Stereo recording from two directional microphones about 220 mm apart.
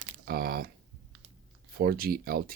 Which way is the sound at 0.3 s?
45° right (ahead or behind).